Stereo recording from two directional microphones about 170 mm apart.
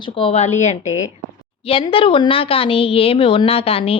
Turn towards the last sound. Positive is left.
turn(degrees=35)  # may be behind; listen again after turning